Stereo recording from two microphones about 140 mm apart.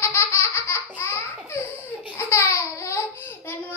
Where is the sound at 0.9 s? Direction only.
15° left (ahead or behind).